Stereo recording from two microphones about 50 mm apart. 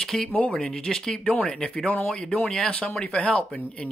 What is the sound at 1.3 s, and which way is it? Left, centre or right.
Speech, left.